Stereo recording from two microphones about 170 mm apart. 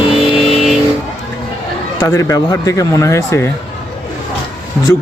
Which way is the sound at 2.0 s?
20° left (ahead or behind).